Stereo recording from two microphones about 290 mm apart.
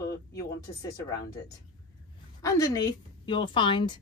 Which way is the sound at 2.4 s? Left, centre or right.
Centre.